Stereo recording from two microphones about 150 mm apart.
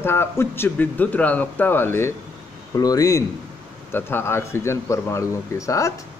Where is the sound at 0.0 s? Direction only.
15° left (ahead or behind).